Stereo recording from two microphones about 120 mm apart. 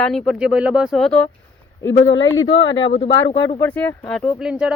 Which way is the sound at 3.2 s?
35° left (ahead or behind).